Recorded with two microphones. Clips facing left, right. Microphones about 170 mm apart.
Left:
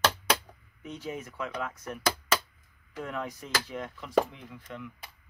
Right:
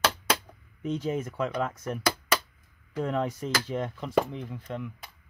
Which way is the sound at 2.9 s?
30° right (ahead or behind).